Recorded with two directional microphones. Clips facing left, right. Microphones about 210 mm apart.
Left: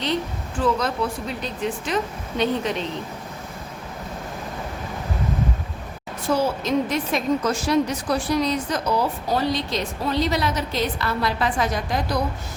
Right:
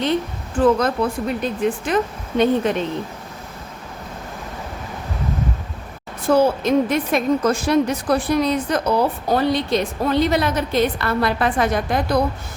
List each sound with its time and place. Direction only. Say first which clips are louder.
0.6 s speech: right 6 dB; 50° right (ahead or behind)
6.2 s a woman's voice: right 6 dB; 55° right (ahead or behind)